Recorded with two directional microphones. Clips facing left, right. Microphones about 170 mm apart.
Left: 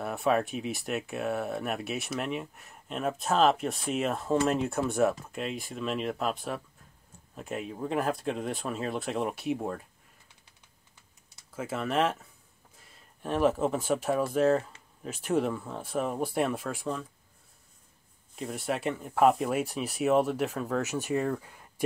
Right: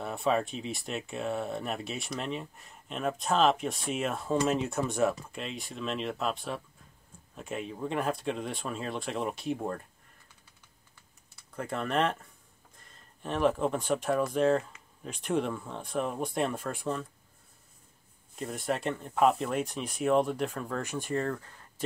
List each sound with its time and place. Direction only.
0.0 s speech: centre (ahead or behind)
11.5 s speech: 5° left (ahead or behind)
18.3 s speech: centre (ahead or behind)